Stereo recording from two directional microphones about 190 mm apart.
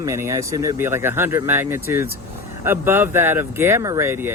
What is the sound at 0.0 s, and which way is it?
Speech, 15° right (ahead or behind).